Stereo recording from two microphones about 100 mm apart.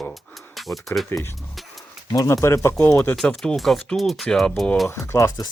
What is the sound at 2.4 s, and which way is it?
Speech, 30° left (ahead or behind).